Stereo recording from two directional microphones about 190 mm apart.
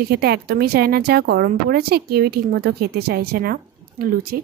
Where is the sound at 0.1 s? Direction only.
55° right (ahead or behind).